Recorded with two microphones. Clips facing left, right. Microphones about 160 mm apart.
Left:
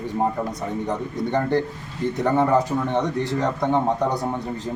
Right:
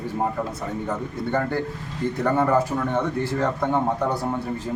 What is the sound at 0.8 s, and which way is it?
A man's voice, 20° left (ahead or behind).